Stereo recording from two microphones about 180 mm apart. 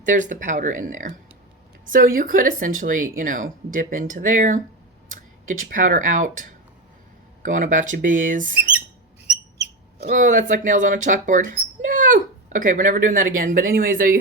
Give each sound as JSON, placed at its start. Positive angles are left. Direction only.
{"t": 0.0, "sound": "speech", "side_deg": -45}
{"t": 7.4, "sound": "speech", "side_deg": -45}
{"t": 10.1, "sound": "speech", "side_deg": -45}